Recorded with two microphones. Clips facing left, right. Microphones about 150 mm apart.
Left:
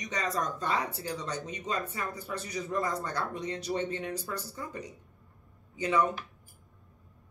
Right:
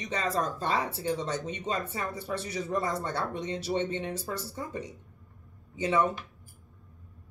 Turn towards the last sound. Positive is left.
turn(degrees=-25)  # may be behind; listen again after turning